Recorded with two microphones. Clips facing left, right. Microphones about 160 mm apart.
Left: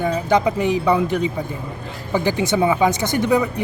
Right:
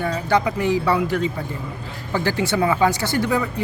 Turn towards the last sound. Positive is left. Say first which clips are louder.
# left 3 dB
turn(degrees=20)  # may be behind; listen again after turning